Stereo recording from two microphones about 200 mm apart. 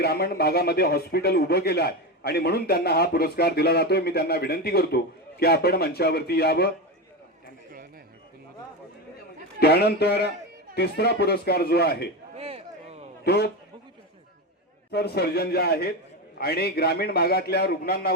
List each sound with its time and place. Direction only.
0.0 s speech: 50° left (ahead or behind)
9.6 s speech: 50° left (ahead or behind)
12.4 s a sound: 30° right (ahead or behind)
13.2 s speech: 55° left (ahead or behind)
14.9 s speech: 55° left (ahead or behind)